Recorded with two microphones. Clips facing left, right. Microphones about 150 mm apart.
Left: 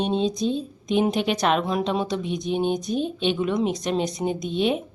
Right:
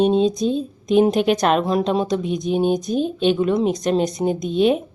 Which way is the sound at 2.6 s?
45° right (ahead or behind).